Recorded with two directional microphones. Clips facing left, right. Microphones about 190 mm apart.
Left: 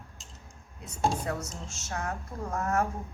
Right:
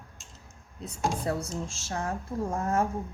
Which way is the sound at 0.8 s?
30° right (ahead or behind).